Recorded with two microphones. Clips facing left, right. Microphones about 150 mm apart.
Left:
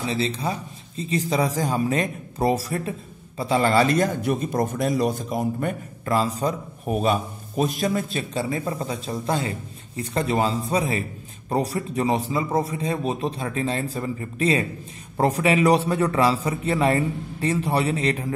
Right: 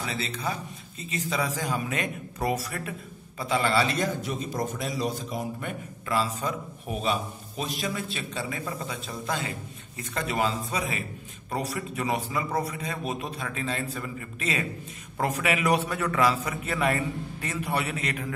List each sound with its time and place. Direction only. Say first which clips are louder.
0.0 s speech: left 6 dB; 30° left (ahead or behind)